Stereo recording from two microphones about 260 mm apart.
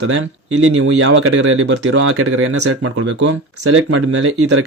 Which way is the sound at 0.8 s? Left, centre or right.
Right.